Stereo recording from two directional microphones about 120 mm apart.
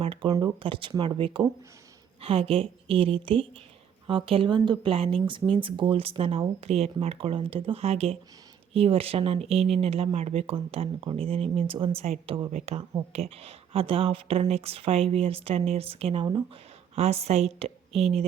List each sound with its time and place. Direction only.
0.0 s speech: 50° right (ahead or behind)
0.3 s speech: 30° right (ahead or behind)
0.6 s speech: 45° right (ahead or behind)
12.5 s speech: 65° right (ahead or behind)
13.0 s a woman's voice: 55° right (ahead or behind)